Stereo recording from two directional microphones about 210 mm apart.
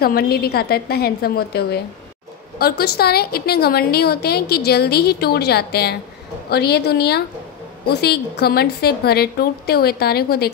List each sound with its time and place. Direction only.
0.0 s a woman's voice: 50° left (ahead or behind)